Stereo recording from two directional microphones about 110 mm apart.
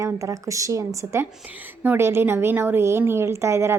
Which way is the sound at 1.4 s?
15° right (ahead or behind).